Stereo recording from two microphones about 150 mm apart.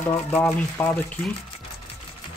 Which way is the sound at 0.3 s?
10° left (ahead or behind).